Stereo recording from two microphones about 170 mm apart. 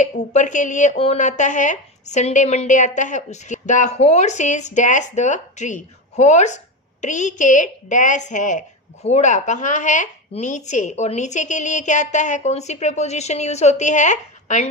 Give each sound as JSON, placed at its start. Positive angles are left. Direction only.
{"t": 0.0, "sound": "speech", "side_deg": 45}